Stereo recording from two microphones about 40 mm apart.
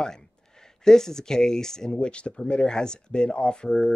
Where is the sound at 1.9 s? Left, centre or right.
Left.